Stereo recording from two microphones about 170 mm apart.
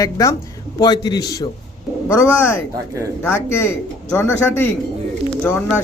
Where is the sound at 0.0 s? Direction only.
20° left (ahead or behind).